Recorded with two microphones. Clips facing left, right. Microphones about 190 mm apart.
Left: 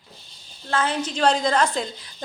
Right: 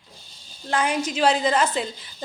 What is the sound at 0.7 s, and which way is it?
A woman's voice, 15° right (ahead or behind).